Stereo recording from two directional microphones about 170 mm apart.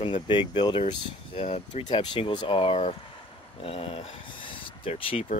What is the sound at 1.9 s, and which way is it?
Speech, 30° left (ahead or behind).